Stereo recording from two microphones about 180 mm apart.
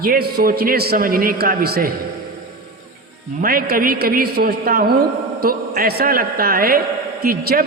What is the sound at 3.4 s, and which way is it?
Speech, 55° right (ahead or behind).